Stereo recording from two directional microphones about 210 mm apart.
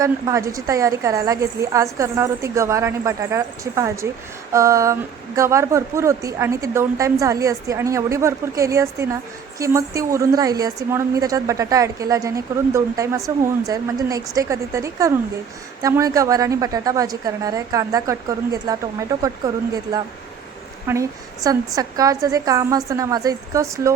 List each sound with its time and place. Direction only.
0.0 s speech: 15° right (ahead or behind)
20.8 s speech: 15° right (ahead or behind)